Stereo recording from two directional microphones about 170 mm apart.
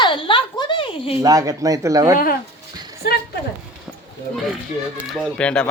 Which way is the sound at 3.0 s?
65° left (ahead or behind).